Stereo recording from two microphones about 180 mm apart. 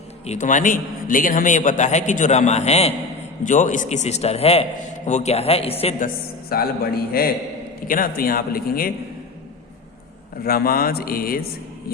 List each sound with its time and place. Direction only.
0.3 s a man's voice: 45° left (ahead or behind)
6.5 s speech: 55° left (ahead or behind)
10.4 s speech: 55° left (ahead or behind)